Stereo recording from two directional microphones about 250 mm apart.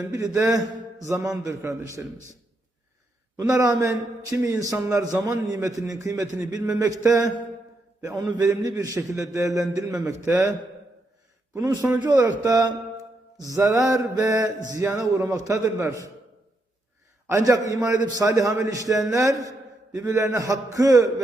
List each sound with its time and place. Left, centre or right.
0.0 s a man's voice: centre
3.3 s a man's voice: centre
11.5 s a man's voice: centre
17.2 s a man's voice: centre